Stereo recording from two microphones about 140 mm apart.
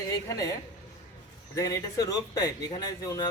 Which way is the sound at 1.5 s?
25° left (ahead or behind).